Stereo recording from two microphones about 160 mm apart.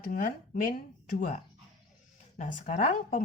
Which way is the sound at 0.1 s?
60° left (ahead or behind).